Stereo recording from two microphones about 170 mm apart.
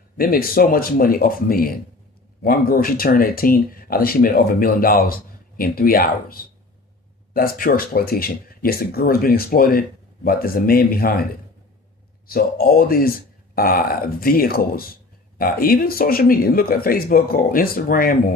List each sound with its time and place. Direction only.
0.2 s speech: 60° left (ahead or behind)
12.3 s speech: 60° left (ahead or behind)